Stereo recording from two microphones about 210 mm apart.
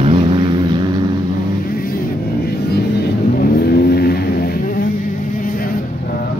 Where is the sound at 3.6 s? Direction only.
50° left (ahead or behind).